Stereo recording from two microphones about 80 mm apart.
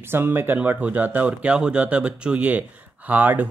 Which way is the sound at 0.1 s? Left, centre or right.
Right.